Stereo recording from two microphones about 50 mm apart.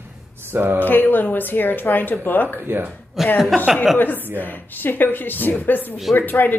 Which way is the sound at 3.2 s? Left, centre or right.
Centre.